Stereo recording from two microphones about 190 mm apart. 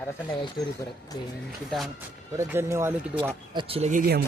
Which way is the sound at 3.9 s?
50° right (ahead or behind).